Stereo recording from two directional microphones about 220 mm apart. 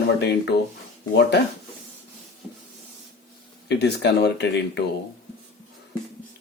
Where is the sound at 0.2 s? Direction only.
50° left (ahead or behind).